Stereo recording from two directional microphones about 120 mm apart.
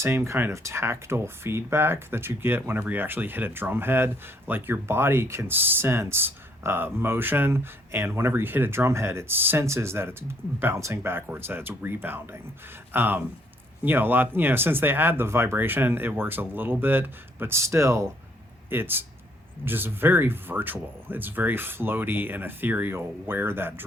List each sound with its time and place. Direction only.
0.0 s speech: 20° right (ahead or behind)